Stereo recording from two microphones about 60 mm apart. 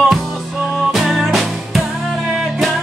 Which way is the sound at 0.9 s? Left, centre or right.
Centre.